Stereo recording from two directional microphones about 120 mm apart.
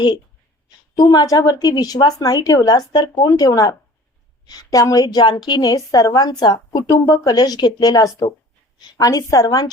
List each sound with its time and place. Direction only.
0.9 s a woman's voice: 35° left (ahead or behind)